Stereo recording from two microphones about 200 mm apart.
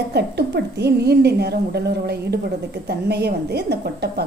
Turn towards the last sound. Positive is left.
turn(degrees=-55)  # may be behind; listen again after turning